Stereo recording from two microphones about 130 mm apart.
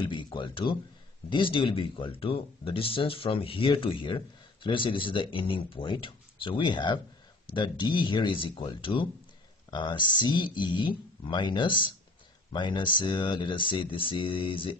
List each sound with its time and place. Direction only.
0.0 s speech: 40° left (ahead or behind)